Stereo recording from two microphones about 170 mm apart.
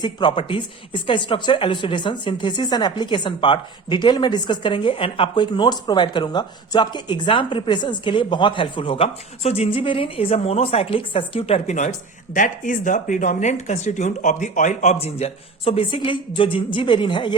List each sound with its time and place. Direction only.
0.0 s a woman's voice: 25° left (ahead or behind)